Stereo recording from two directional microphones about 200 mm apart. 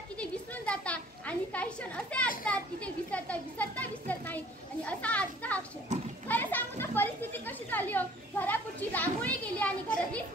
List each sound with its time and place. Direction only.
0.2 s a sound: 5° left (ahead or behind)
2.4 s a child's voice: 5° left (ahead or behind)
5.9 s children playing: 35° right (ahead or behind)
6.2 s children playing: 10° left (ahead or behind)